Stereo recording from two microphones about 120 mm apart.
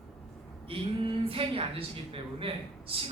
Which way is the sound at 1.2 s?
50° right (ahead or behind).